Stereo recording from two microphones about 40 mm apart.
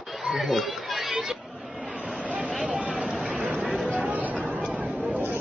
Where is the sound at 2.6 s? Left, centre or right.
Right.